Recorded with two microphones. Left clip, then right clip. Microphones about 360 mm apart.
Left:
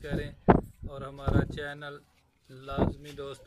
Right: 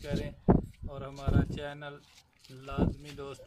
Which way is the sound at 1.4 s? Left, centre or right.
Centre.